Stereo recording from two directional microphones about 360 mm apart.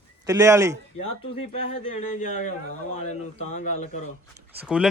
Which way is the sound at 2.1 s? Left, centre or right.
Left.